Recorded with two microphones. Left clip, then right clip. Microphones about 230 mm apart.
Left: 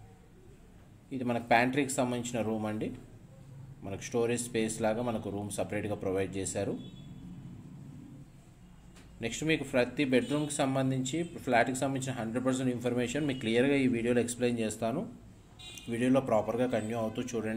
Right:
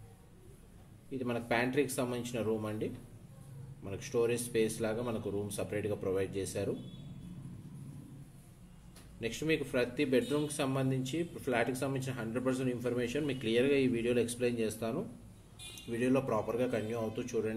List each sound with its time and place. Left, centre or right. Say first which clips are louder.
1.1 s speech: left 6 dB; left
9.2 s speech: left 2 dB; left